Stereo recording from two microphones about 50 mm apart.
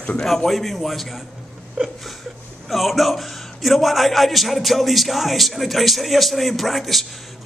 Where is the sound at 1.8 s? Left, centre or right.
Right.